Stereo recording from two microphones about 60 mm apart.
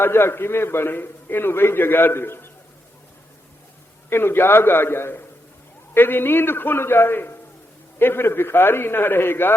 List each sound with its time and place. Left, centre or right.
0.0 s a man's voice: left
4.1 s a man's voice: left